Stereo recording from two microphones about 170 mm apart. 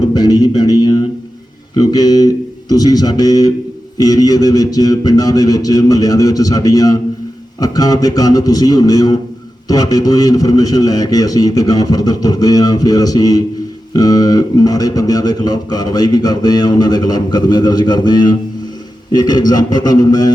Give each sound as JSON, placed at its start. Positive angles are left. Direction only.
{"t": 0.1, "sound": "speech", "side_deg": 20}